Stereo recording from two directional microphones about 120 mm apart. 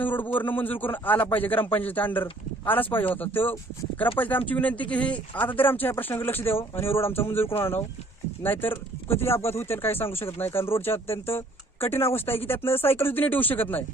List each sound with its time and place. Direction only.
0.0 s speech: 15° left (ahead or behind)